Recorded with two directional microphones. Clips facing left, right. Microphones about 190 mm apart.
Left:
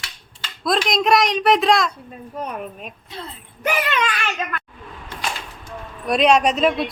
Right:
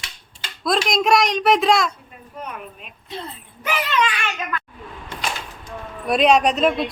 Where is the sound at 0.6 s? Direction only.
Centre (ahead or behind).